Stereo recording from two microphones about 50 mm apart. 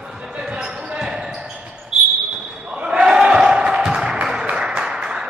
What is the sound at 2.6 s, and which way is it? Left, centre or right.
Basketball bounce, centre.